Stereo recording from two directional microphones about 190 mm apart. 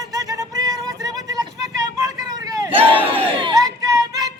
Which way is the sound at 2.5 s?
10° right (ahead or behind).